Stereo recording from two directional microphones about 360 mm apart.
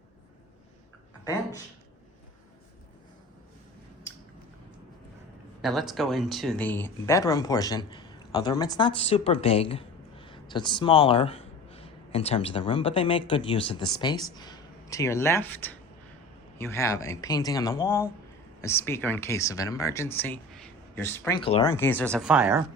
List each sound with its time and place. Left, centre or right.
1.2 s speech: centre
5.6 s speech: centre